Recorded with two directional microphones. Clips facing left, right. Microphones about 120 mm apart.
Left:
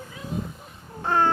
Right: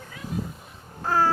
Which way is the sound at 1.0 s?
Centre (ahead or behind).